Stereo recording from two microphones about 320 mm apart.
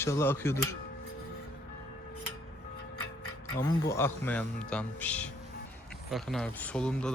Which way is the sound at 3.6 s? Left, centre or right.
Centre.